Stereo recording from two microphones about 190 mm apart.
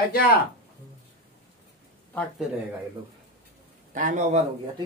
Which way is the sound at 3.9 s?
40° right (ahead or behind).